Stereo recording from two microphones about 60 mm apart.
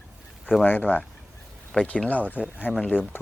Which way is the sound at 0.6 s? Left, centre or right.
Left.